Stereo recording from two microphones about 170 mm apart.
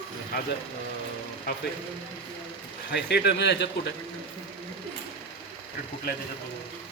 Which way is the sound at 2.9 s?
75° left (ahead or behind).